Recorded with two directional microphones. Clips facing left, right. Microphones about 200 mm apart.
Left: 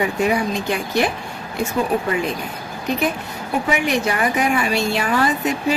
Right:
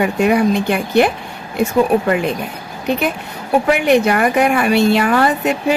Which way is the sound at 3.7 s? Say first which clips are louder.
Right 7 dB; 60° right (ahead or behind).